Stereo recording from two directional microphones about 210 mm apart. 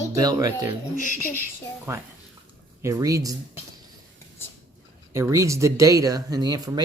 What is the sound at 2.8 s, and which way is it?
Speech, 15° right (ahead or behind).